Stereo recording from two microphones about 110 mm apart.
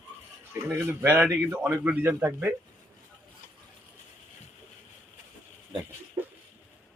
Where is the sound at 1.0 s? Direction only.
20° right (ahead or behind).